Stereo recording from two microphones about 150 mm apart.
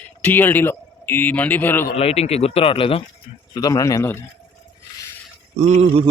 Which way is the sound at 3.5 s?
25° left (ahead or behind).